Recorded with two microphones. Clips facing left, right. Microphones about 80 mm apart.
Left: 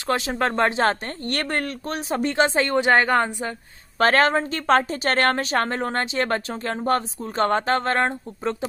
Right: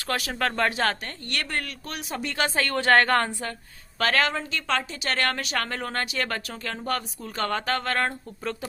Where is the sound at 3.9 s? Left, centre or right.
Left.